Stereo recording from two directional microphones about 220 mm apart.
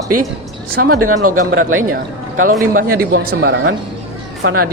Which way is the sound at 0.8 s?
90° right.